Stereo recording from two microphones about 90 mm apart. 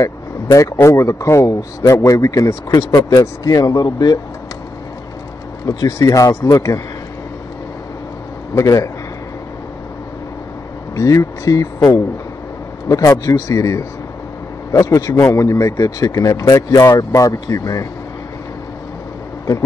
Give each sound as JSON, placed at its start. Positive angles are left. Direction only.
{"t": 0.0, "sound": "vehicle", "side_deg": 40}
{"t": 0.8, "sound": "speech", "side_deg": 35}
{"t": 3.2, "sound": "speech", "side_deg": 40}
{"t": 5.7, "sound": "speech", "side_deg": 35}
{"t": 8.5, "sound": "speech", "side_deg": 35}
{"t": 11.0, "sound": "speech", "side_deg": 40}